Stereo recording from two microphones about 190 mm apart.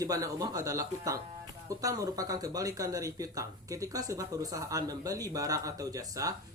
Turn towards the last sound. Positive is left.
turn(degrees=-20)  # may be behind; listen again after turning